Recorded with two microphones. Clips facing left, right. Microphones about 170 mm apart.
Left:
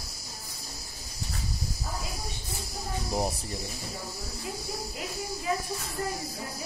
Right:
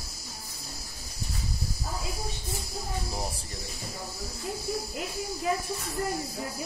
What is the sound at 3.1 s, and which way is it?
Speech, 15° left (ahead or behind).